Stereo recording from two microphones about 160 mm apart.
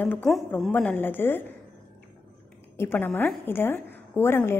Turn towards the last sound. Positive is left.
turn(degrees=15)  # may be behind; listen again after turning